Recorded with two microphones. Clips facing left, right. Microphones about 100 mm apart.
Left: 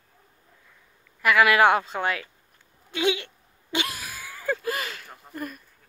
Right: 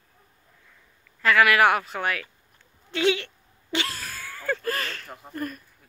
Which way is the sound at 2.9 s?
15° left (ahead or behind).